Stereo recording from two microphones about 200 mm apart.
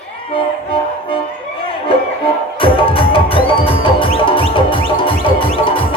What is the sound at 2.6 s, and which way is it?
Music, 25° left (ahead or behind).